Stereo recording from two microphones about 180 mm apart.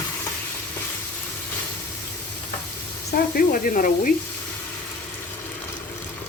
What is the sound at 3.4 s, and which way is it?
Speech, 50° left (ahead or behind).